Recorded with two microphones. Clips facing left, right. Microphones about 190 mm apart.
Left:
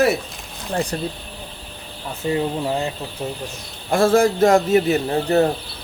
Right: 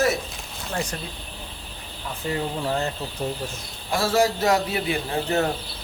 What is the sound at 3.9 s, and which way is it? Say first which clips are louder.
A man's voice: left 6 dB; 50° left (ahead or behind).